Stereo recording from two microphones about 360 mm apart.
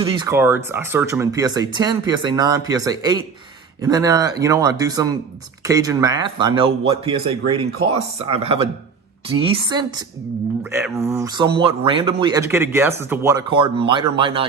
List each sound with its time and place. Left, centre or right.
0.0 s speech: centre